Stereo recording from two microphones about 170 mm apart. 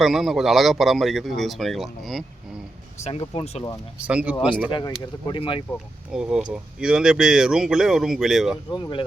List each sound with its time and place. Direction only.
0.0 s speech: centre (ahead or behind)
3.0 s speech: 35° left (ahead or behind)
4.0 s speech: 5° right (ahead or behind)
4.7 s speech: 25° left (ahead or behind)
6.1 s speech: 5° right (ahead or behind)
8.7 s speech: 30° left (ahead or behind)